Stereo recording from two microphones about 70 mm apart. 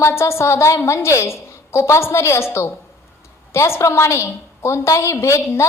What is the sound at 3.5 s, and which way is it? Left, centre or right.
A woman's voice, left.